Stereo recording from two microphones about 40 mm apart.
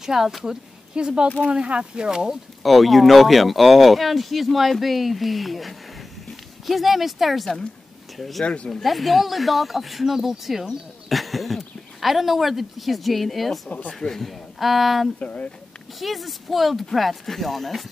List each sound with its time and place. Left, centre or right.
0.0 s speech: centre
0.9 s speech: right
2.6 s speech: centre
15.1 s speech: left
16.0 s speech: centre